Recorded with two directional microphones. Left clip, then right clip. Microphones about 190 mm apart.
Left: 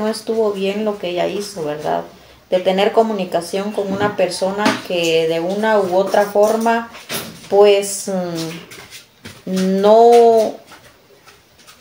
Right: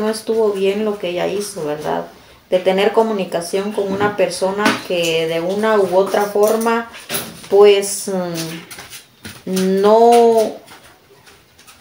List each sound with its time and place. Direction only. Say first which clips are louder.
0.0 s speech: right 1 dB; centre (ahead or behind)
9.8 s speech: left 1 dB; 5° right (ahead or behind)